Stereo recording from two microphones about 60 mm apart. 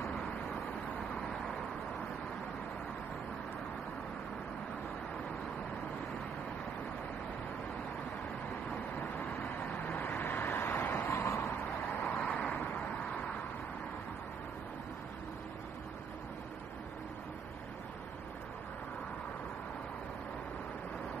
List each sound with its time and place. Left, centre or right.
9.8 s vehicle: left
12.1 s vehicle: left